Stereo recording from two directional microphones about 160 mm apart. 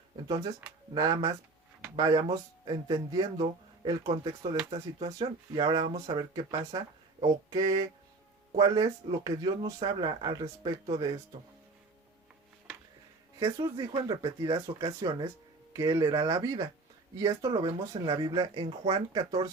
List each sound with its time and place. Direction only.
0.9 s speech: 25° right (ahead or behind)
13.4 s speech: 25° right (ahead or behind)